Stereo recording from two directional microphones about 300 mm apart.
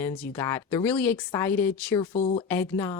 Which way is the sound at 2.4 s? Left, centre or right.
Centre.